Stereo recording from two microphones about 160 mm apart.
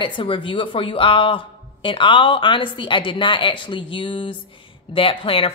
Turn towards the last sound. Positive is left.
turn(degrees=35)  # may be behind; listen again after turning